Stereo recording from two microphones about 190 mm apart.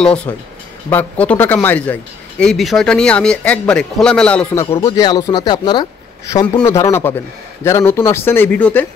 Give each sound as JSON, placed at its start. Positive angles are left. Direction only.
{"t": 0.0, "sound": "a man's voice", "side_deg": 5}
{"t": 4.8, "sound": "speech", "side_deg": 20}